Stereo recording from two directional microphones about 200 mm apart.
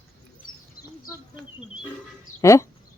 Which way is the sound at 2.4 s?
15° left (ahead or behind).